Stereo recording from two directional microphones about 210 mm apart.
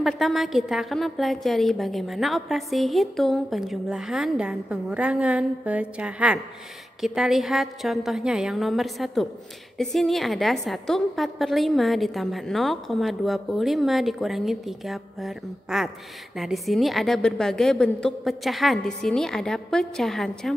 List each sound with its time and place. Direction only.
0.0 s a woman's voice: centre (ahead or behind)